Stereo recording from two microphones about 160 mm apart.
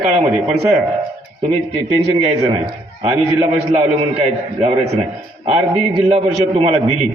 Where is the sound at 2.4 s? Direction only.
30° right (ahead or behind).